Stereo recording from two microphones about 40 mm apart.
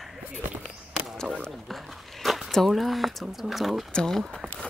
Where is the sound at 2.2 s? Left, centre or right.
Centre.